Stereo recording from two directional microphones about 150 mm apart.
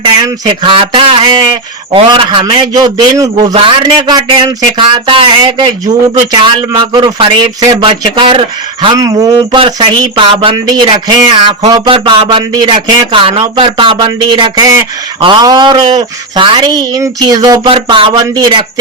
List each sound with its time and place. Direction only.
0.0 s speech: 30° right (ahead or behind)
9.0 s speech: 25° right (ahead or behind)
10.7 s speech: 25° right (ahead or behind)
17.7 s speech: 35° right (ahead or behind)